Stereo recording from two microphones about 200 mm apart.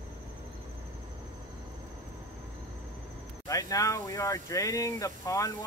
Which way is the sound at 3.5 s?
15° left (ahead or behind).